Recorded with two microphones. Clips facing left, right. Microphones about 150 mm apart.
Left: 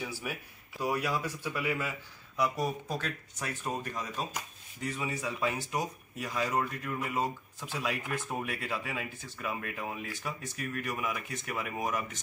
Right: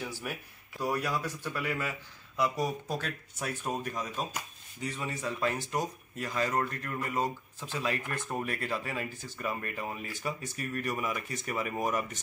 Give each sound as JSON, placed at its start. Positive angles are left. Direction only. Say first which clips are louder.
{"t": 0.0, "sound": "a man's voice", "louder": "even", "side_deg": 5}